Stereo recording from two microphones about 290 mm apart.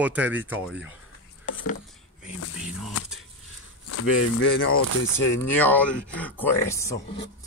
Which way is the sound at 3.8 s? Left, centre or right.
Left.